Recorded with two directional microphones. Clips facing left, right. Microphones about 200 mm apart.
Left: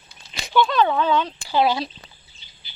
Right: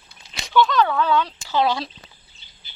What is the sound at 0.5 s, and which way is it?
Speech, 20° left (ahead or behind).